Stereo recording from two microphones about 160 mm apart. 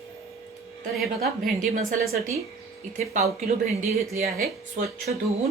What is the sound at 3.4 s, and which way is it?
Speech, 45° right (ahead or behind).